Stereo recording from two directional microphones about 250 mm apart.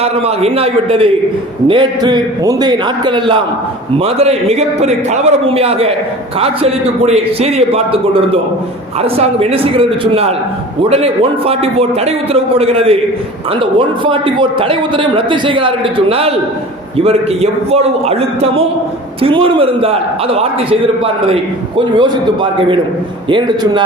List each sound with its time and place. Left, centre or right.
0.0 s a man's voice: right